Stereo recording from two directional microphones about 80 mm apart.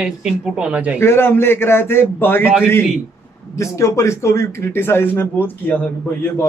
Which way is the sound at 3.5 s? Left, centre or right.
Left.